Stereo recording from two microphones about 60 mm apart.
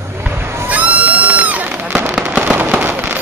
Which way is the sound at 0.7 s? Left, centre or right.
Right.